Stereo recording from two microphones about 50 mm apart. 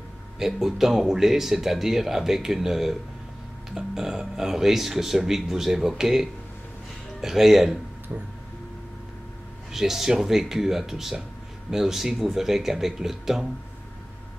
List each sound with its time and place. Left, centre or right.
0.4 s speech: centre
8.1 s speech: right
9.7 s speech: centre